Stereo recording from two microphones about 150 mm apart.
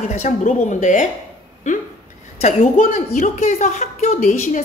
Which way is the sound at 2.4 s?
45° left (ahead or behind).